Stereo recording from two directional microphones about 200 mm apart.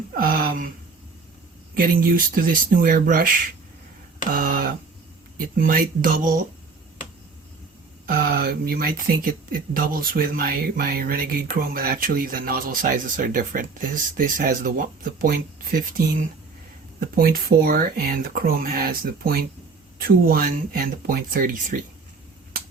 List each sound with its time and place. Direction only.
0.1 s a sound: 45° right (ahead or behind)
1.7 s speech: 45° right (ahead or behind)
4.3 s a sound: 45° right (ahead or behind)
5.5 s speech: 45° right (ahead or behind)
8.0 s speech: 50° right (ahead or behind)
17.2 s speech: 45° right (ahead or behind)